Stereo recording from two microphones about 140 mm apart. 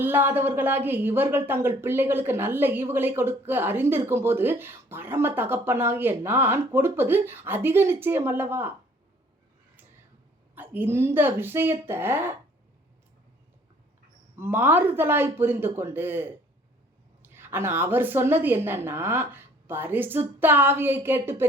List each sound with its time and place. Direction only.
0.0 s a woman's voice: 15° right (ahead or behind)
10.5 s a woman's voice: 15° right (ahead or behind)
14.3 s a woman's voice: 15° right (ahead or behind)